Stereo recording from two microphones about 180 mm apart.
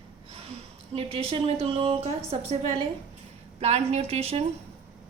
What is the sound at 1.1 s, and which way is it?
A woman's voice, 30° right (ahead or behind).